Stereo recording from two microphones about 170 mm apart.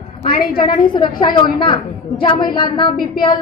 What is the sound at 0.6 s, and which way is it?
A woman's voice, 30° left (ahead or behind).